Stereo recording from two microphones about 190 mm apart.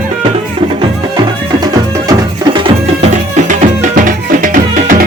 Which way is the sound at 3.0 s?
40° right (ahead or behind).